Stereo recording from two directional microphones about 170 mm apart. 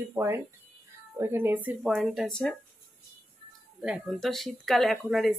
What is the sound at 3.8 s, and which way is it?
Speech, 5° right (ahead or behind).